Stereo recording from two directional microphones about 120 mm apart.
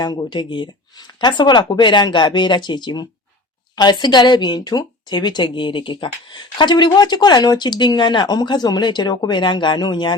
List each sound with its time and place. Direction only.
0.0 s speech: 35° left (ahead or behind)